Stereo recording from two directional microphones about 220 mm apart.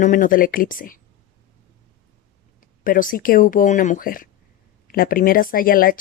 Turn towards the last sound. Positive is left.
turn(degrees=40)  # may be behind; listen again after turning